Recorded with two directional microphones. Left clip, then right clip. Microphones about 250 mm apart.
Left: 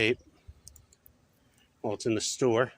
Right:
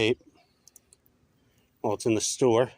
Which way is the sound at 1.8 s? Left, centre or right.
Centre.